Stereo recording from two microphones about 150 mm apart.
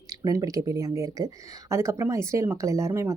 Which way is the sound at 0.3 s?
25° right (ahead or behind).